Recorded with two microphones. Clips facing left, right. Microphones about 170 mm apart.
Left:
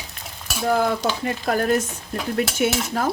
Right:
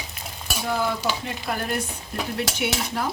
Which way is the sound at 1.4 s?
45° left (ahead or behind).